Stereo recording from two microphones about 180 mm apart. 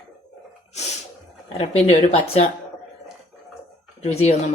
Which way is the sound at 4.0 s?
35° left (ahead or behind).